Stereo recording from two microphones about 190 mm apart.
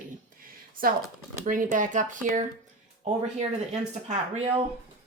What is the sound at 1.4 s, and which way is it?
Speech, 45° right (ahead or behind).